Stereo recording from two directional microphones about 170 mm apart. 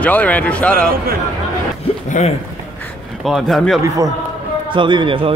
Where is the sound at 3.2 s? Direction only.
Centre (ahead or behind).